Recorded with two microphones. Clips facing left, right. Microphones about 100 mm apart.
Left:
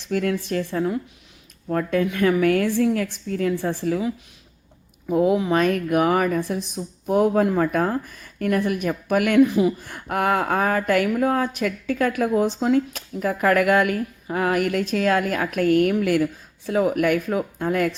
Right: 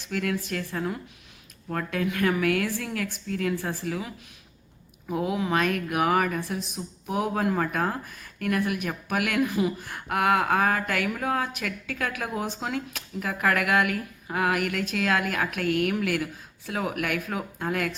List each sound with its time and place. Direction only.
0.1 s speech: 40° left (ahead or behind)
0.7 s speech: 30° left (ahead or behind)
5.1 s speech: 30° left (ahead or behind)